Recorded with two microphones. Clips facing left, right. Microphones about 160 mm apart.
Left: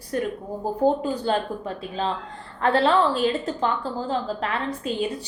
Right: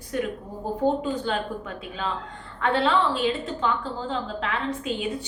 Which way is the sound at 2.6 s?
40° left (ahead or behind).